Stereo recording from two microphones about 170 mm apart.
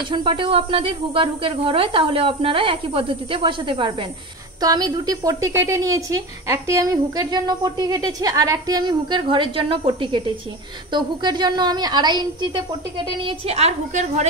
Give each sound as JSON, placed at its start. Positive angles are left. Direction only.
{"t": 0.1, "sound": "a woman's voice", "side_deg": -30}
{"t": 13.5, "sound": "a woman's voice", "side_deg": -40}